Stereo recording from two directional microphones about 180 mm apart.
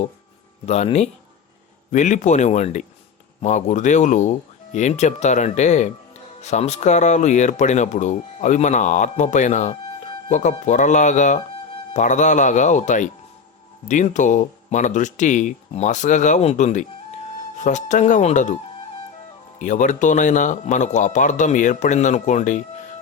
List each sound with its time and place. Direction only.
0.6 s a man's voice: 35° left (ahead or behind)
19.5 s a man's voice: 45° left (ahead or behind)